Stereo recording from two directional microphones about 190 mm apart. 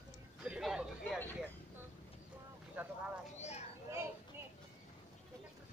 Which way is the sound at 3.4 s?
35° left (ahead or behind).